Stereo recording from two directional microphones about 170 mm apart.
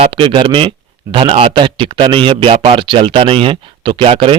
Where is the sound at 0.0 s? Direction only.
30° right (ahead or behind).